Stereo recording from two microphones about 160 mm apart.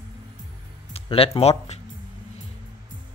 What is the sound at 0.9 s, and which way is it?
Speech, 35° left (ahead or behind).